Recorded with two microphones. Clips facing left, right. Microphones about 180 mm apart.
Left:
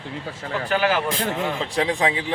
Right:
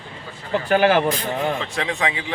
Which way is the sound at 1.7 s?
35° left (ahead or behind).